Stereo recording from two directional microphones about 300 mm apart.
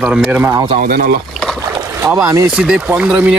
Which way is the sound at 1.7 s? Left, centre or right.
Centre.